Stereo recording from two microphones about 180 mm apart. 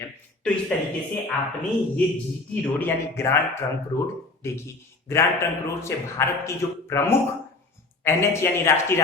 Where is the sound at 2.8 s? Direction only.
10° left (ahead or behind).